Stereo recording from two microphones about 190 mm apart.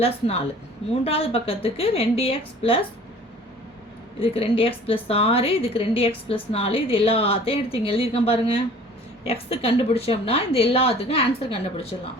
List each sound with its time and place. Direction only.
0.0 s a woman's voice: 30° left (ahead or behind)
4.2 s a woman's voice: 30° left (ahead or behind)